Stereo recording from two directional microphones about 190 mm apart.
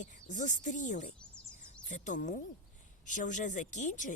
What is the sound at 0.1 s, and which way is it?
Speech, 40° left (ahead or behind).